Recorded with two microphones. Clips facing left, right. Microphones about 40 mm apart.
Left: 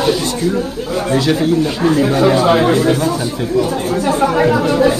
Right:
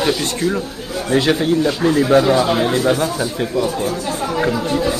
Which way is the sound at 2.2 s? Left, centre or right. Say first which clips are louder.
Left 4 dB; left.